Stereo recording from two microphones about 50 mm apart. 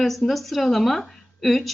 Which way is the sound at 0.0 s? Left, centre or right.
Centre.